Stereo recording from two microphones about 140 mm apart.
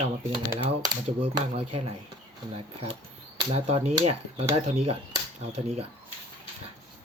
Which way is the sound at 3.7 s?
50° right (ahead or behind).